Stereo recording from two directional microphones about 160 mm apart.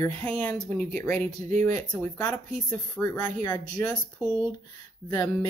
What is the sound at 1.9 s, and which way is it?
Speech, 20° left (ahead or behind).